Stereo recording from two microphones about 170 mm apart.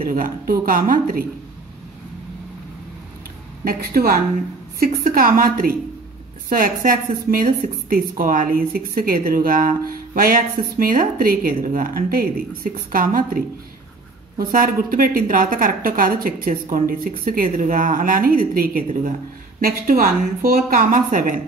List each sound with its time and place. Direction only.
0.0 s speech: 55° right (ahead or behind)
3.6 s speech: 60° right (ahead or behind)
14.5 s speech: 55° right (ahead or behind)